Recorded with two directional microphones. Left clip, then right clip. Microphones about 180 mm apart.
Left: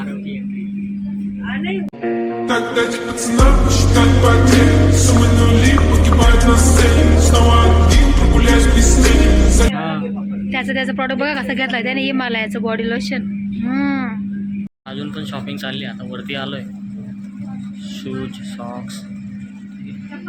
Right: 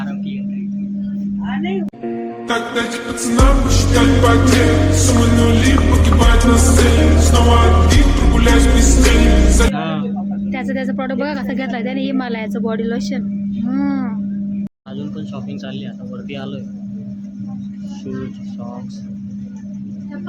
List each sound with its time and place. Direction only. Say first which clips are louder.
2.0 s music: left 4 dB; centre (ahead or behind)
9.7 s music: even; 15° right (ahead or behind)
10.5 s speech: left 4 dB; 10° right (ahead or behind)